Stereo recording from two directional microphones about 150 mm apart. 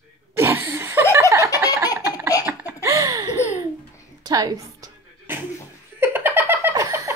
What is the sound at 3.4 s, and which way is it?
Laughter, 50° left (ahead or behind).